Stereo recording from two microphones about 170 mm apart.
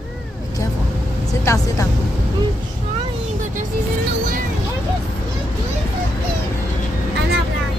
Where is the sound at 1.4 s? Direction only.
15° left (ahead or behind).